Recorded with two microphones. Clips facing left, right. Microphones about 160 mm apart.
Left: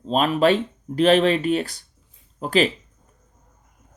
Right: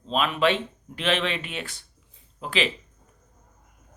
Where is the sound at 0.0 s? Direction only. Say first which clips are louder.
Left 5 dB; 40° left (ahead or behind).